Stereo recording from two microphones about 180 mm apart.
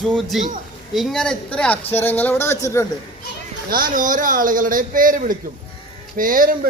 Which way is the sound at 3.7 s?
50° right (ahead or behind).